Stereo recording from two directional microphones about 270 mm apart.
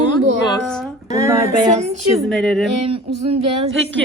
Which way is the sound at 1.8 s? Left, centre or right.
Right.